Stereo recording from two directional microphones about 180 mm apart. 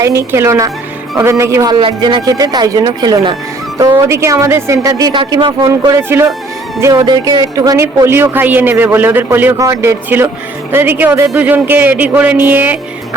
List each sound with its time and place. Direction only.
0.2 s speech: 15° right (ahead or behind)